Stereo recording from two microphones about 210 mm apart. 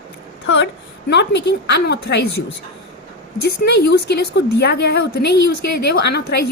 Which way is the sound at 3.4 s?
50° left (ahead or behind).